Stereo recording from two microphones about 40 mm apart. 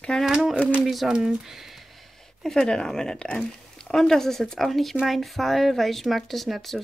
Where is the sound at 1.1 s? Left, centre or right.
Centre.